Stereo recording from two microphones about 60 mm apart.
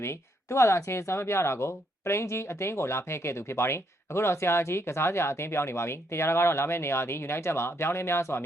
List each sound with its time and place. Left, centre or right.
0.0 s speech: left